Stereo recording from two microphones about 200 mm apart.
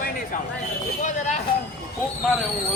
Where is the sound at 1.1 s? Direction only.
35° left (ahead or behind).